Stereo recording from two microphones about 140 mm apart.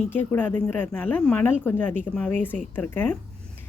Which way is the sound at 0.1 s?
15° left (ahead or behind).